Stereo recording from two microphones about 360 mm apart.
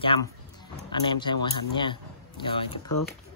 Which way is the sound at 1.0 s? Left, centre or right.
Centre.